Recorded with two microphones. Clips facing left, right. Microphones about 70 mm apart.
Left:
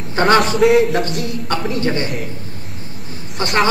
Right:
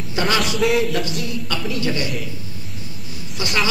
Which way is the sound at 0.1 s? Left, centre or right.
Left.